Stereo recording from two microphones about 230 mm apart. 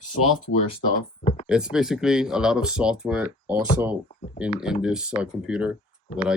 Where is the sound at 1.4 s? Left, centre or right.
Centre.